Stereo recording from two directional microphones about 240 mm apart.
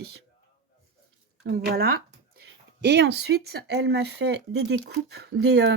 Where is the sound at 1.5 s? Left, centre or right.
Right.